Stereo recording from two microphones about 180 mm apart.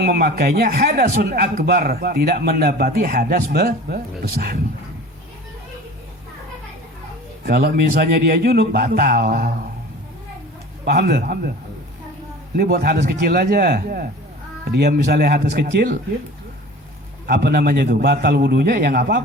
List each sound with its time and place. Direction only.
0.0 s a man's voice: 60° right (ahead or behind)
7.4 s a man's voice: 60° right (ahead or behind)
10.8 s a man's voice: 60° right (ahead or behind)
12.5 s a man's voice: 60° right (ahead or behind)
17.2 s a man's voice: 65° right (ahead or behind)